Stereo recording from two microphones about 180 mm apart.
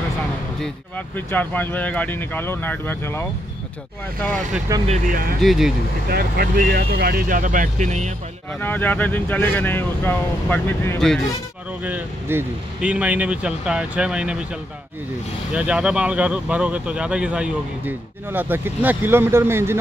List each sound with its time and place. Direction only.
0.6 s speech: 10° left (ahead or behind)
4.8 s speech: 45° right (ahead or behind)
5.4 s speech: centre (ahead or behind)
6.0 s speech: 60° right (ahead or behind); by 8.1 s 40° right (ahead or behind)
8.5 s speech: 10° left (ahead or behind)
11.8 s speech: 10° right (ahead or behind)
15.5 s speech: 5° right (ahead or behind)